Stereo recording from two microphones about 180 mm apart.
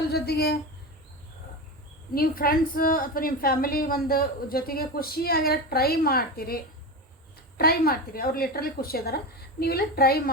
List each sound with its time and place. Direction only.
0.1 s speech: 60° left (ahead or behind)
2.1 s a woman's voice: 55° left (ahead or behind)
7.6 s a woman's voice: 55° left (ahead or behind)